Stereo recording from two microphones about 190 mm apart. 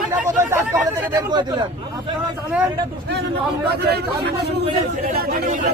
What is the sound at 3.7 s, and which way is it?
Speech, 60° right (ahead or behind).